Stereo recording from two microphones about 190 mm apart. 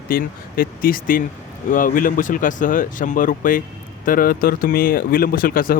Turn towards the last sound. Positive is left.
turn(degrees=50)  # may be behind; listen again after turning